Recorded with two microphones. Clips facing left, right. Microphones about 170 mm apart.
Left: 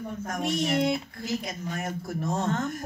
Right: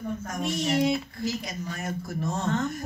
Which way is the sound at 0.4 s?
55° left (ahead or behind).